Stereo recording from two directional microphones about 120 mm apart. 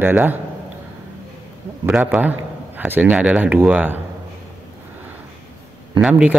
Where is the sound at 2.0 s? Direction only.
15° right (ahead or behind).